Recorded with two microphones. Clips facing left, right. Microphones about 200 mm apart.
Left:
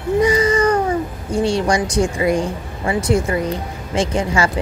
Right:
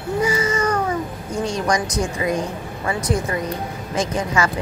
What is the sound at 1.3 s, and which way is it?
Speech, 30° left (ahead or behind).